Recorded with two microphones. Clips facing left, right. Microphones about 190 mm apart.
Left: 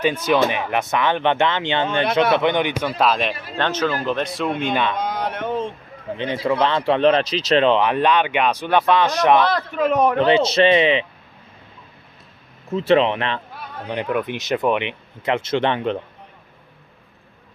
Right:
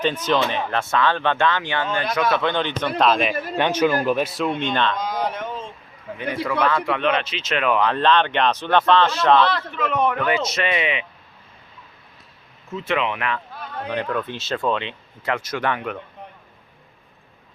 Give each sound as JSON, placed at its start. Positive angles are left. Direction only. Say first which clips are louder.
{"t": 0.0, "sound": "speech", "louder": "left 3 dB", "side_deg": 10}
{"t": 3.0, "sound": "speech", "louder": "right 1 dB", "side_deg": 0}
{"t": 3.6, "sound": "speech", "louder": "right 2 dB", "side_deg": -10}
{"t": 4.9, "sound": "a sound", "louder": "left 1 dB", "side_deg": 60}
{"t": 6.1, "sound": "speech", "louder": "left 3 dB", "side_deg": 25}
{"t": 9.5, "sound": "a man's voice", "louder": "left 5 dB", "side_deg": 40}
{"t": 10.2, "sound": "speech", "louder": "left 7 dB", "side_deg": 25}
{"t": 12.7, "sound": "speech", "louder": "left 8 dB", "side_deg": 35}
{"t": 13.9, "sound": "speech", "louder": "left 3 dB", "side_deg": 15}